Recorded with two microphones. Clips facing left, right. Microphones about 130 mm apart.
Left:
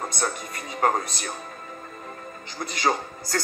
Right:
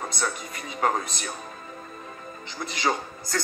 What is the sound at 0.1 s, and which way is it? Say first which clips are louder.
Music: left 1 dB; 45° left (ahead or behind).